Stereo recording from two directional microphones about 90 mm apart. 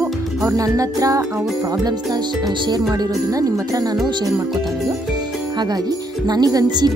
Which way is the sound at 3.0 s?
40° right (ahead or behind).